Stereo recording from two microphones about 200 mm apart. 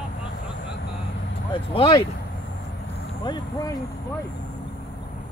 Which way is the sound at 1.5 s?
25° left (ahead or behind).